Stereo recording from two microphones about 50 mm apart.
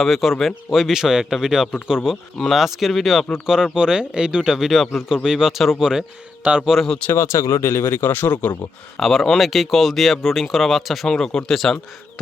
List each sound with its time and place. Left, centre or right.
0.0 s speech: centre
3.4 s speech: centre
5.0 s speech: centre
6.4 s a man's voice: right
7.2 s speech: left
8.3 s speech: left
9.0 s speech: centre
11.1 s speech: centre